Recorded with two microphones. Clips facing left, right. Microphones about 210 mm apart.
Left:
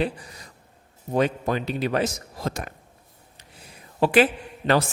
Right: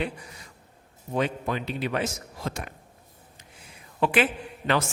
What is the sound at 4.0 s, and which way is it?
Speech, 40° left (ahead or behind).